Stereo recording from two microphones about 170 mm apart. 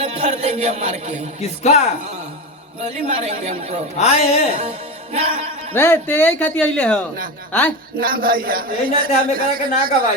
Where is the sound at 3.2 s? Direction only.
40° right (ahead or behind).